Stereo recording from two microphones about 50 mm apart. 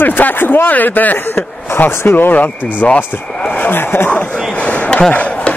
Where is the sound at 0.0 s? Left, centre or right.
Left.